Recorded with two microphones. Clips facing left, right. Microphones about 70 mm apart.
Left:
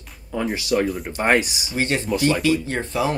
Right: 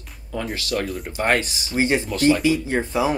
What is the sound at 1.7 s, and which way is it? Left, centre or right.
Speech, centre.